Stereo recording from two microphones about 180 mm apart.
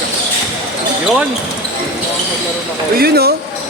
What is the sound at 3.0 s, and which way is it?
Speech, 60° right (ahead or behind).